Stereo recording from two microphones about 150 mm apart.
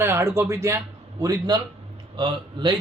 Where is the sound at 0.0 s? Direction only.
15° right (ahead or behind).